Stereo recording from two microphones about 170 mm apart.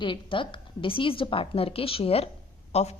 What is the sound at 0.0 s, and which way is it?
A woman's voice, 30° left (ahead or behind).